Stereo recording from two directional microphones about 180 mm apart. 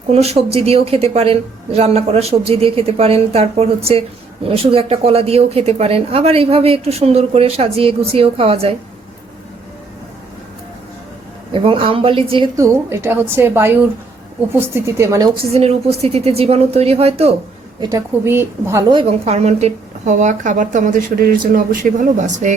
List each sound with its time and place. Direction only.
0.1 s a woman's voice: 35° right (ahead or behind)
11.5 s speech: 30° right (ahead or behind)
12.5 s a woman's voice: 15° right (ahead or behind)
15.5 s a woman's voice: 35° right (ahead or behind)
17.7 s a woman's voice: 15° right (ahead or behind); by 22.5 s 40° right (ahead or behind)